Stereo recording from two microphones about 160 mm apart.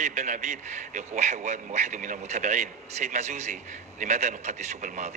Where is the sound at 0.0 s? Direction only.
50° right (ahead or behind).